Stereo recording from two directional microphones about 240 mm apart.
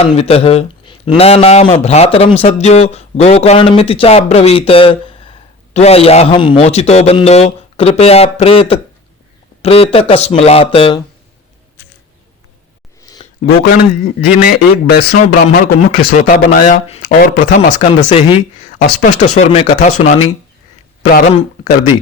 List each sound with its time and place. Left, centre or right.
0.0 s a man's voice: left
13.0 s a sound: centre
14.0 s a man's voice: left